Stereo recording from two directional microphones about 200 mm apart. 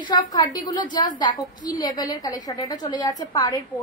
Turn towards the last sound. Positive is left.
turn(degrees=20)  # may be behind; listen again after turning